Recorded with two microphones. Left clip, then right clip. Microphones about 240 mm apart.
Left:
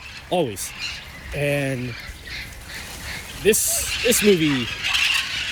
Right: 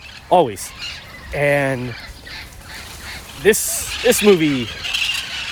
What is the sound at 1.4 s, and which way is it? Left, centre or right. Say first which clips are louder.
Fowl: right 7 dB; centre.